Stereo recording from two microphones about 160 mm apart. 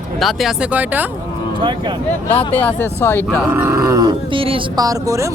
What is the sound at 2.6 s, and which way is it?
Speech, 10° left (ahead or behind).